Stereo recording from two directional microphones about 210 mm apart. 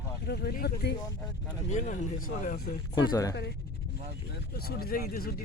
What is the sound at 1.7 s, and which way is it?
Speech, 35° left (ahead or behind).